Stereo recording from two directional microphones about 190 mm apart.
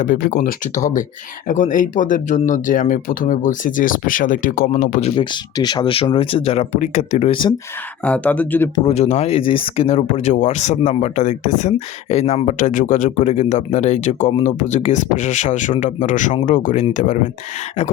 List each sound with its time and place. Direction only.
0.0 s speech: 45° left (ahead or behind)
8.0 s speech: 5° left (ahead or behind)
8.9 s speech: 35° left (ahead or behind)